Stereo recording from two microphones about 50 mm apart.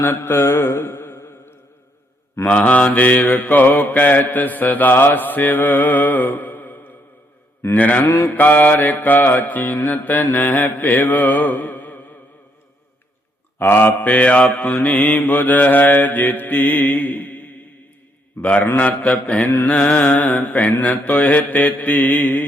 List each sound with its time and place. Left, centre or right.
0.0 s mantra: left
0.3 s mantra: left
2.5 s mantra: left
13.6 s mantra: left